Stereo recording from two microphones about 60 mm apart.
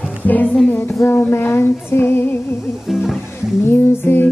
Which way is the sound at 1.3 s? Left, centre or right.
Left.